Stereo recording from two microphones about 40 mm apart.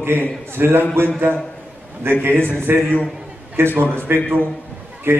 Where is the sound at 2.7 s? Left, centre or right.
Right.